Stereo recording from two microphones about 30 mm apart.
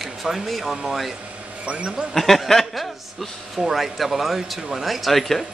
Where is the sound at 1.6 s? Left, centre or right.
Right.